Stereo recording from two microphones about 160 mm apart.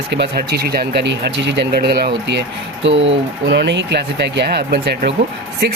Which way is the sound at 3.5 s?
90° right.